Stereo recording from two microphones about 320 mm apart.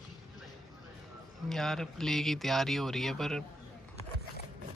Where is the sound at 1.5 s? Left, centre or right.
Centre.